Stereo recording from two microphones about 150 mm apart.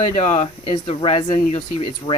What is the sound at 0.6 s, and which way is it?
Speech, 35° left (ahead or behind).